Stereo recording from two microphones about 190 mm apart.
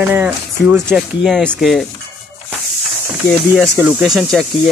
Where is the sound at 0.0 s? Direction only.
10° right (ahead or behind).